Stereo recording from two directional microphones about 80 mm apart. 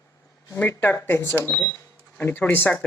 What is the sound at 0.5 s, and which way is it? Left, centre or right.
Speech, left.